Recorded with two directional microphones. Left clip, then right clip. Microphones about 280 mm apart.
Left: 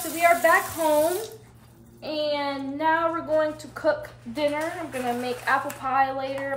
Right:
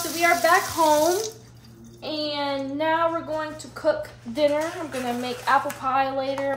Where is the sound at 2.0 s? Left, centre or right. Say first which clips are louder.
Left 1 dB; centre.